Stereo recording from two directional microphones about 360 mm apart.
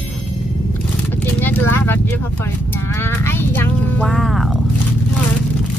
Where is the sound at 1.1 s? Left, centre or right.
Centre.